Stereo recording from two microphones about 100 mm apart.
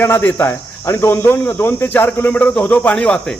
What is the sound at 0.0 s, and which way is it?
Speech, 20° left (ahead or behind).